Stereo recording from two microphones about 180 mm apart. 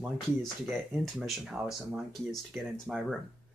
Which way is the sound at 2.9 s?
5° right (ahead or behind).